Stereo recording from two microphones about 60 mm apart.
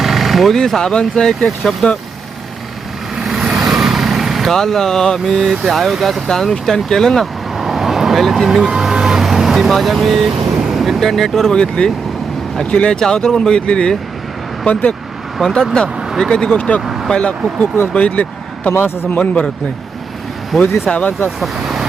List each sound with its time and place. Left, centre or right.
0.0 s speech: centre
3.2 s vehicle: centre
4.5 s speech: centre
7.5 s vehicle: centre
10.6 s a man's voice: centre; by 14.9 s left
15.4 s speech: centre
16.8 s vehicle: centre
17.1 s a man's voice: centre
20.5 s speech: centre